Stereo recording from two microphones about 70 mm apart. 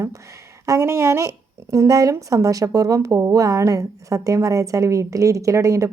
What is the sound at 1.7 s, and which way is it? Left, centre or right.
A woman's voice, right.